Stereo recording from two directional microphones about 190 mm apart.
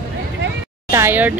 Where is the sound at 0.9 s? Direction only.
10° right (ahead or behind).